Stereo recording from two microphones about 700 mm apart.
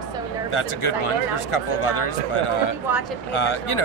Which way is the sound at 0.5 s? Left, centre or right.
Left.